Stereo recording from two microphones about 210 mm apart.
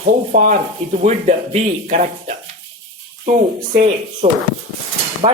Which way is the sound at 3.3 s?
35° right (ahead or behind).